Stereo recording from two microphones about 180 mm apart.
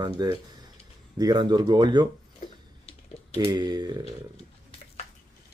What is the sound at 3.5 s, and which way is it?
Speech, 25° right (ahead or behind).